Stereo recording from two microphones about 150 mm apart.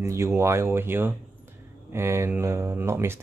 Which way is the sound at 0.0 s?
20° right (ahead or behind).